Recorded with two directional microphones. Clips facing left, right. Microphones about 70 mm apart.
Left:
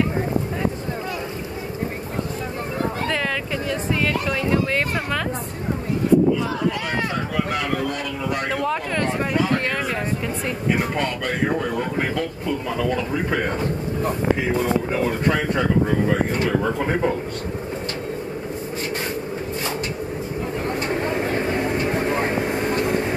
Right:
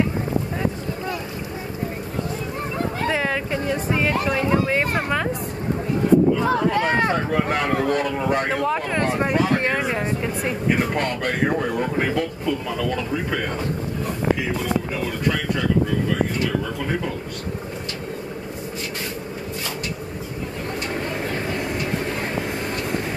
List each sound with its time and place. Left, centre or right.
3.1 s speech: centre
6.4 s a man's voice: right
8.9 s speech: right
12.4 s speech: centre
14.6 s speech: left
20.9 s vehicle: left